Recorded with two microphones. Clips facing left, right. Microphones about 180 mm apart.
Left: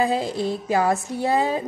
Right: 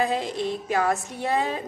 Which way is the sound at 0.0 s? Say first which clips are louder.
Left 3 dB; 30° left (ahead or behind).